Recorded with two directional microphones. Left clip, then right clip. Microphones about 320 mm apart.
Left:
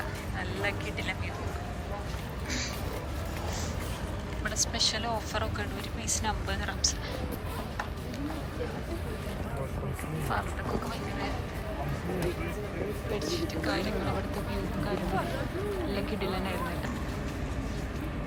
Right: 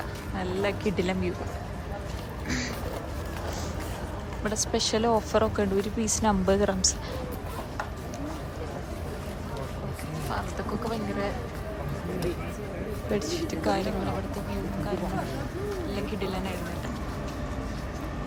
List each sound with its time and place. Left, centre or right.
0.3 s speech: centre
4.4 s a woman's voice: centre
13.7 s speech: centre
15.9 s speech: centre